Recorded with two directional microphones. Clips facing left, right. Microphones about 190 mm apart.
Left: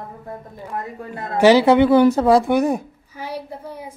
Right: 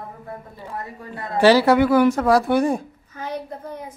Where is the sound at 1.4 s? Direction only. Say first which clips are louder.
Left 2 dB; 20° left (ahead or behind).